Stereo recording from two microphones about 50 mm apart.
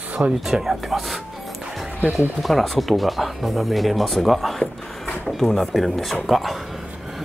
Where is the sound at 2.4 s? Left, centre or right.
Centre.